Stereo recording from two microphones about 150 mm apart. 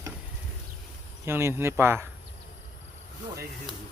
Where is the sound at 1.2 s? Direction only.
15° right (ahead or behind).